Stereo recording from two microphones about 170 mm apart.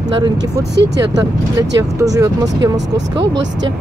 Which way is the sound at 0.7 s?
90° right.